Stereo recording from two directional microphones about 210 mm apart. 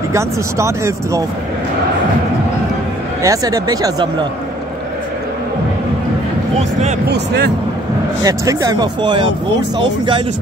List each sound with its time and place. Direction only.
0.1 s speech: 15° right (ahead or behind)
3.2 s speech: 15° right (ahead or behind)
7.1 s speech: 50° right (ahead or behind)
8.2 s speech: 15° right (ahead or behind)